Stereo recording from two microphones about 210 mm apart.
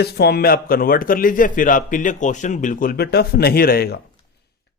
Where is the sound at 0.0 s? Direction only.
50° left (ahead or behind).